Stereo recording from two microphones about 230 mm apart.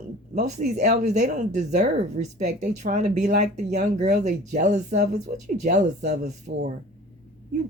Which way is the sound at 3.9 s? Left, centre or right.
Right.